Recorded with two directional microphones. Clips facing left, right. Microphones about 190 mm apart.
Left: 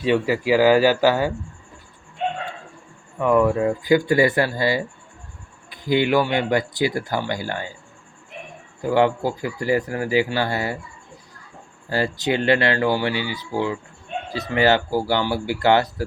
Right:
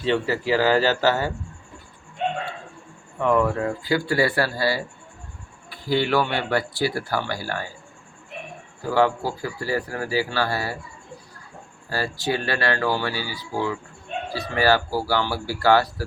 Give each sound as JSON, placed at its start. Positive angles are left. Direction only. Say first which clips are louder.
{"t": 0.0, "sound": "speech", "louder": "left 3 dB", "side_deg": 15}
{"t": 3.2, "sound": "speech", "louder": "left 3 dB", "side_deg": 10}
{"t": 8.8, "sound": "speech", "louder": "left 2 dB", "side_deg": 20}
{"t": 11.9, "sound": "speech", "louder": "left 4 dB", "side_deg": 20}